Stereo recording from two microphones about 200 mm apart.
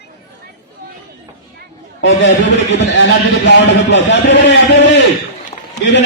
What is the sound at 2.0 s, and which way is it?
A man's voice, 65° left (ahead or behind).